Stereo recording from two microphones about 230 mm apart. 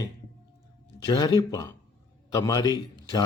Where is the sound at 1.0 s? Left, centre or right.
Centre.